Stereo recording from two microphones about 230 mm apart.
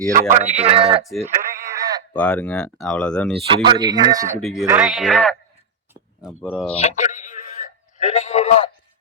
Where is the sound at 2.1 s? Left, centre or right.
Centre.